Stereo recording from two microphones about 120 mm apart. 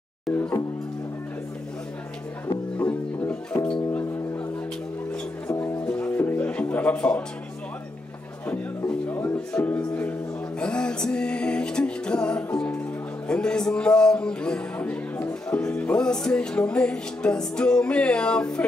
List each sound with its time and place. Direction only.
2.8 s music: 15° left (ahead or behind)
3.6 s a man's voice: 10° left (ahead or behind)
5.6 s music: 10° left (ahead or behind)
8.5 s music: 20° left (ahead or behind)
9.5 s a man's voice: 10° left (ahead or behind)